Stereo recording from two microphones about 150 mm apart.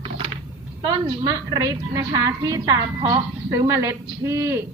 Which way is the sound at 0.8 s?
25° right (ahead or behind).